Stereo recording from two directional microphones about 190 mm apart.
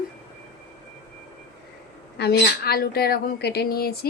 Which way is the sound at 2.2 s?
60° left (ahead or behind).